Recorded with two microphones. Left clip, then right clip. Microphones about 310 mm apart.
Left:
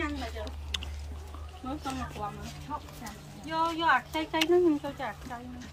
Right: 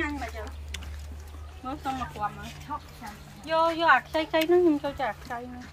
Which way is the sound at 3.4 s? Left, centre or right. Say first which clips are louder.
Right 5 dB; centre.